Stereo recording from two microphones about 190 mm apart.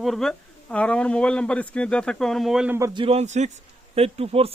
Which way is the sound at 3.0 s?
30° right (ahead or behind).